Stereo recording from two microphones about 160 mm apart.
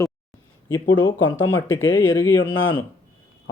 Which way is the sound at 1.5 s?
15° left (ahead or behind).